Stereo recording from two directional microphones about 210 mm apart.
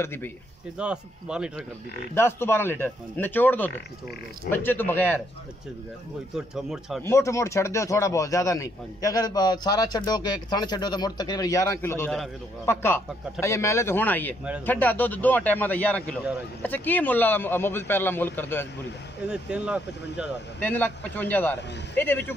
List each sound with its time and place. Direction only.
0.0 s speech: 10° left (ahead or behind)
0.7 s speech: 5° right (ahead or behind)
2.1 s speech: 10° left (ahead or behind)
6.3 s speech: centre (ahead or behind)
7.0 s speech: 15° left (ahead or behind)
19.2 s speech: 5° right (ahead or behind)
20.6 s speech: 10° left (ahead or behind)